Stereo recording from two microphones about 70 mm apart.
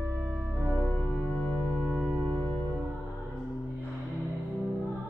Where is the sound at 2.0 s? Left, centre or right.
Centre.